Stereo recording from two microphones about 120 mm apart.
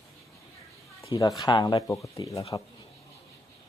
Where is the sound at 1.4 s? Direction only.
35° left (ahead or behind).